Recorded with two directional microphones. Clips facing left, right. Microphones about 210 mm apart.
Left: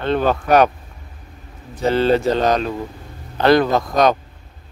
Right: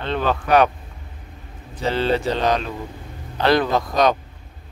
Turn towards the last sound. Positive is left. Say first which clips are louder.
# left 2 dB
turn(degrees=45)  # may be behind; listen again after turning